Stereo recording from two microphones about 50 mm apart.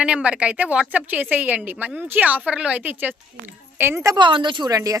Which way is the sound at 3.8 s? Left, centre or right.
Right.